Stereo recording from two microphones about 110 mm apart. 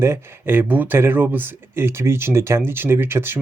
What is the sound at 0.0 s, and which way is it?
Speech, 20° right (ahead or behind).